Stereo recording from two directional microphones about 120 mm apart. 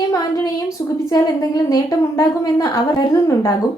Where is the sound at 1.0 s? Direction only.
35° left (ahead or behind).